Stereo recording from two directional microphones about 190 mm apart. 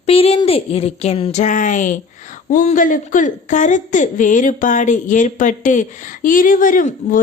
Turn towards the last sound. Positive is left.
turn(degrees=45)  # may be behind; listen again after turning